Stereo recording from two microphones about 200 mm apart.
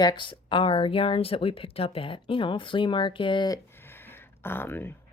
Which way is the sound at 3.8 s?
10° left (ahead or behind).